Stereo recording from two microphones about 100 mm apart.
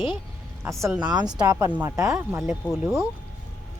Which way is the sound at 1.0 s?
40° right (ahead or behind).